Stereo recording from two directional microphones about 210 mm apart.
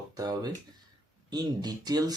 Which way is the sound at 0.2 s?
20° right (ahead or behind).